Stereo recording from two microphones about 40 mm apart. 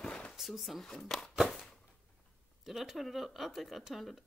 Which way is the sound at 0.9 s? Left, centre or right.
Centre.